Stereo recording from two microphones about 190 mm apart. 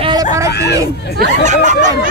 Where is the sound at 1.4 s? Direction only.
40° right (ahead or behind).